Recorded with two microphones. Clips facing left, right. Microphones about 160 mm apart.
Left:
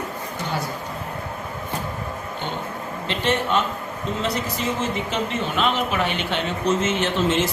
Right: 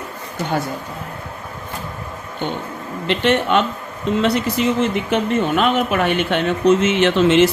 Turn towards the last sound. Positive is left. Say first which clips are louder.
# right 8 dB
turn(degrees=-75)  # may be behind; listen again after turning